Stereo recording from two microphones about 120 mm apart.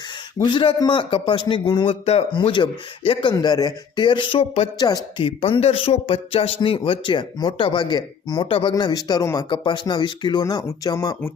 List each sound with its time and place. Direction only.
0.4 s a man's voice: 45° left (ahead or behind)
2.3 s a man's voice: 45° left (ahead or behind)
3.3 s speech: 35° left (ahead or behind)
5.2 s a man's voice: 50° left (ahead or behind); by 8.4 s 35° left (ahead or behind)
8.4 s a man's voice: 50° left (ahead or behind)
8.8 s speech: 35° left (ahead or behind)